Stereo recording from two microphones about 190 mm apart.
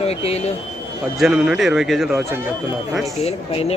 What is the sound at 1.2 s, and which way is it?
Speech, 5° right (ahead or behind).